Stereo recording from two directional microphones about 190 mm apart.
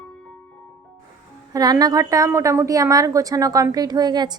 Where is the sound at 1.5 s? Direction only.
20° right (ahead or behind).